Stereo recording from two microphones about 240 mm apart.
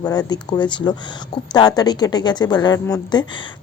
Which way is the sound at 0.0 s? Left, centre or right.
Centre.